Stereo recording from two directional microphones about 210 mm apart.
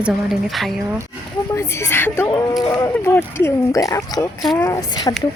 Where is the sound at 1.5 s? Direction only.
10° left (ahead or behind).